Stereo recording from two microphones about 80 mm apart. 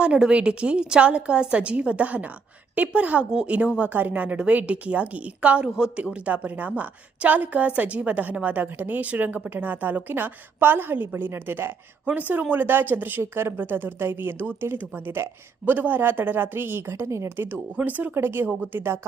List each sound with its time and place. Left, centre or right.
0.0 s a woman's voice: centre; by 18.9 s right